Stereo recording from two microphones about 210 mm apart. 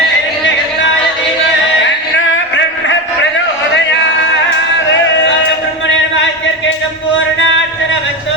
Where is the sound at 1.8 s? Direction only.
65° left (ahead or behind).